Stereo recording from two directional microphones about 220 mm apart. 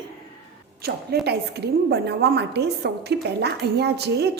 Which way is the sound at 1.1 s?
45° right (ahead or behind).